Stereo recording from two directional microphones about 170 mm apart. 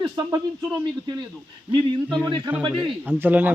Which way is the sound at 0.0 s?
20° right (ahead or behind).